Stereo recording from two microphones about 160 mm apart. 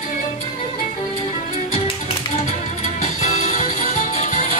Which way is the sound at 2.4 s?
45° left (ahead or behind).